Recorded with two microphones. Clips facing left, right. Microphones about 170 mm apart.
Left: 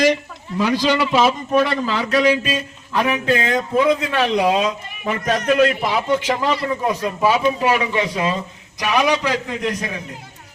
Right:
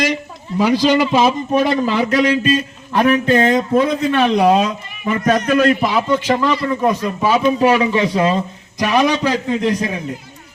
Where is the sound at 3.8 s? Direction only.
55° right (ahead or behind).